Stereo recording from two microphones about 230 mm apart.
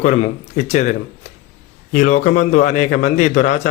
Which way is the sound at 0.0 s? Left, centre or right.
Left.